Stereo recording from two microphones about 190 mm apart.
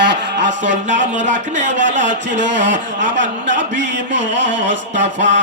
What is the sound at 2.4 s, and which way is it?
Speech, 70° right (ahead or behind).